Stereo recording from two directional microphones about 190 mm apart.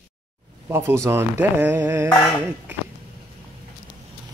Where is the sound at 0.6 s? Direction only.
15° right (ahead or behind).